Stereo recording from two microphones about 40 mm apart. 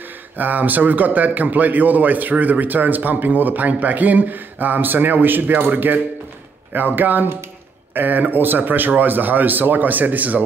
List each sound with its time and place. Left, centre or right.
0.4 s a man's voice: right
7.0 s a man's voice: right